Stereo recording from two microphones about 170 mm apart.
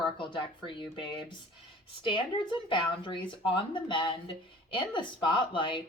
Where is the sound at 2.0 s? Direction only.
30° left (ahead or behind).